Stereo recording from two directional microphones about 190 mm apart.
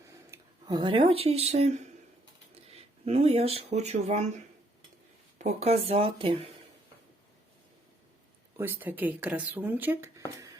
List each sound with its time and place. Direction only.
0.0 s speech: 20° right (ahead or behind); by 4.3 s 35° right (ahead or behind)
5.4 s speech: 35° right (ahead or behind)
8.5 s speech: 10° right (ahead or behind)